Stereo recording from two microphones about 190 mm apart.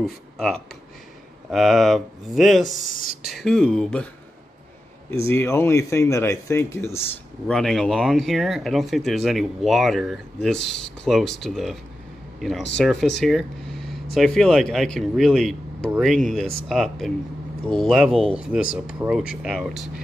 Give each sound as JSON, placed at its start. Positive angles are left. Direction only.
{"t": 0.0, "sound": "speech", "side_deg": 0}
{"t": 2.7, "sound": "speech", "side_deg": 55}
{"t": 3.3, "sound": "speech", "side_deg": 5}
{"t": 5.1, "sound": "speech", "side_deg": 15}